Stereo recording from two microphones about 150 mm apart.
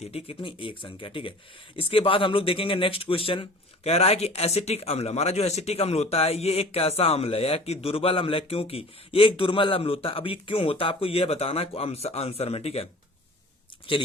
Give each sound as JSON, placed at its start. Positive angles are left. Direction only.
{"t": 0.0, "sound": "speech", "side_deg": 45}